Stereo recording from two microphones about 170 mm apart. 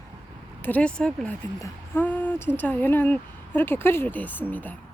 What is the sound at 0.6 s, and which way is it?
Speech, 10° left (ahead or behind).